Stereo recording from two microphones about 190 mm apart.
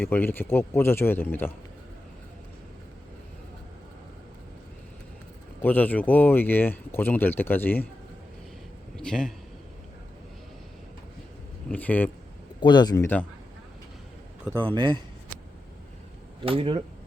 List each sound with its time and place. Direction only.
0.0 s speech: 10° left (ahead or behind)
5.6 s speech: 10° left (ahead or behind)
9.0 s a man's voice: 5° left (ahead or behind)
11.7 s speech: 10° left (ahead or behind)
12.5 s speech: 25° left (ahead or behind)
14.6 s speech: 25° right (ahead or behind)
16.4 s speech: 30° right (ahead or behind)